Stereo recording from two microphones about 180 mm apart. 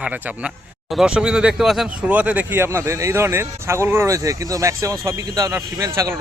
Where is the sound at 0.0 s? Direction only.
5° right (ahead or behind).